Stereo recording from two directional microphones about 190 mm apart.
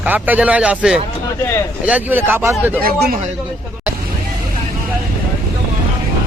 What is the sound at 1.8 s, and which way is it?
Speech, 10° right (ahead or behind).